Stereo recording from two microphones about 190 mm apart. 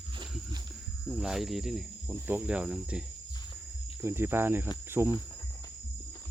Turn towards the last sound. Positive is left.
turn(degrees=-5)  # may be behind; listen again after turning